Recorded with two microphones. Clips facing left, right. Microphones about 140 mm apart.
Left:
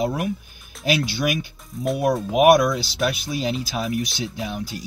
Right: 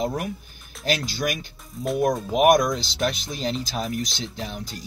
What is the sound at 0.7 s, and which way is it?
Speech, centre (ahead or behind).